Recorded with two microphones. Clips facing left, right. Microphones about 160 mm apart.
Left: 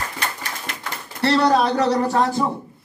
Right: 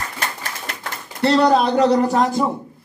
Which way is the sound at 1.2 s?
15° right (ahead or behind).